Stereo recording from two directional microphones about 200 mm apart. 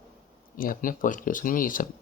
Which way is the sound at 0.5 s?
45° left (ahead or behind).